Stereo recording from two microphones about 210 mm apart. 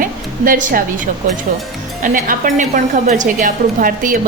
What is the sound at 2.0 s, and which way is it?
A woman's voice, 40° right (ahead or behind).